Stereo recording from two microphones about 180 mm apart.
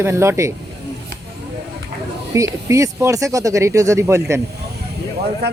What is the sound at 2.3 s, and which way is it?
Speech, 15° right (ahead or behind).